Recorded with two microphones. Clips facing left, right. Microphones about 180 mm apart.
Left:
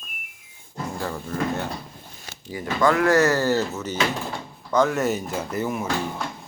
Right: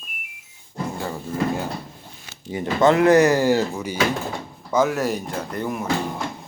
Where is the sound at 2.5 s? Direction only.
25° right (ahead or behind); by 5.8 s 5° left (ahead or behind).